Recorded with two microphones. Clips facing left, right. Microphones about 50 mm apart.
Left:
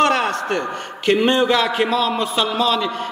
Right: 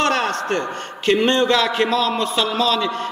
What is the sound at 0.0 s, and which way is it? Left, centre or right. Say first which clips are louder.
Speech: left 2 dB; centre.